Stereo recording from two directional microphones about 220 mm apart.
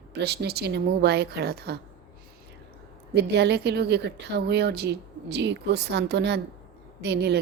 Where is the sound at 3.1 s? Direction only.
50° right (ahead or behind).